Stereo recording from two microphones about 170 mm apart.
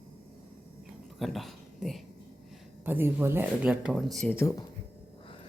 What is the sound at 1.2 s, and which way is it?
Speech, centre (ahead or behind).